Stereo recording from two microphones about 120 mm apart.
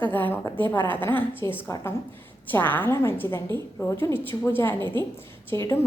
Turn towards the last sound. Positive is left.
turn(degrees=20)  # may be behind; listen again after turning